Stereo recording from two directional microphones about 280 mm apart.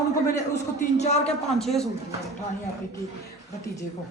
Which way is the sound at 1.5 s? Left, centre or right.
Centre.